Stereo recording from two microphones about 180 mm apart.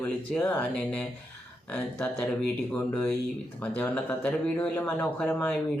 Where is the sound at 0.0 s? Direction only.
10° left (ahead or behind).